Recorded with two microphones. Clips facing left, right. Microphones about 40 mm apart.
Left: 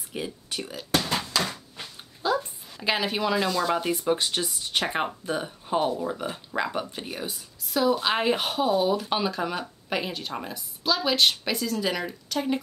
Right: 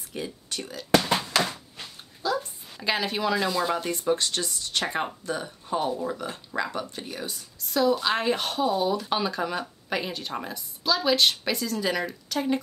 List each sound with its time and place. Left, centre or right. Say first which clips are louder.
0.1 s speech: left 1 dB; centre
2.2 s a sound: left 2 dB; left
2.8 s a woman's voice: left 1 dB; centre
3.4 s speech: even; centre
3.7 s a woman's voice: left 1 dB; centre